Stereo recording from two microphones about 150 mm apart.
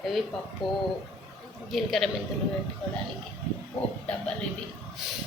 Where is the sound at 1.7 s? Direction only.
Centre (ahead or behind).